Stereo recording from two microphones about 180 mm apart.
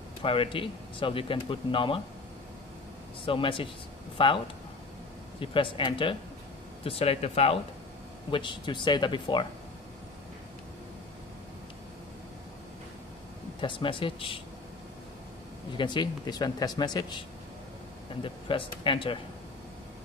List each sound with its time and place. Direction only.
0.2 s speech: 30° left (ahead or behind)
3.3 s speech: 30° left (ahead or behind)
5.4 s speech: 30° left (ahead or behind)
13.6 s speech: 25° left (ahead or behind)
15.8 s speech: 25° left (ahead or behind)
18.2 s speech: 30° left (ahead or behind)